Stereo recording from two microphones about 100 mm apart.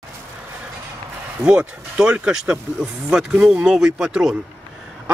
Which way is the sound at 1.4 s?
10° right (ahead or behind).